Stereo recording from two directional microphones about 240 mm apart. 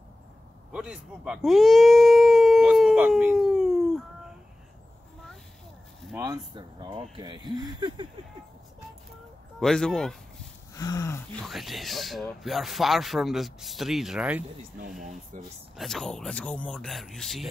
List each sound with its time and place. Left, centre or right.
0.7 s a sound: centre
6.1 s speech: centre
9.6 s speech: centre
10.7 s a sound: centre
11.4 s speech: centre
15.0 s speech: right
15.8 s speech: centre